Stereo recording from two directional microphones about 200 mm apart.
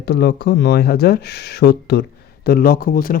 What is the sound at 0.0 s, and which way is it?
Speech, 55° left (ahead or behind).